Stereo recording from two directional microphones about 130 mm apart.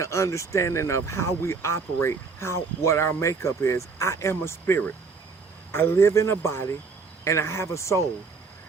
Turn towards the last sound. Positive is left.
turn(degrees=20)  # may be behind; listen again after turning